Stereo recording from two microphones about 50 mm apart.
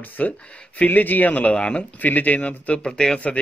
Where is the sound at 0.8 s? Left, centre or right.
Left; by 1.9 s centre.